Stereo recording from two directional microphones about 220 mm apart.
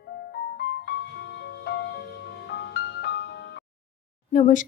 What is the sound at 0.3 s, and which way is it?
Music, 50° left (ahead or behind).